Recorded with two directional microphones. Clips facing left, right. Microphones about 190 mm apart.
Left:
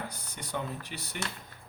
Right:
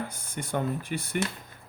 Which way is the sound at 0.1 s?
50° right (ahead or behind).